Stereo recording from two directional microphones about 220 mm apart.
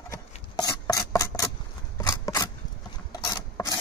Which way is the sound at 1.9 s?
15° left (ahead or behind).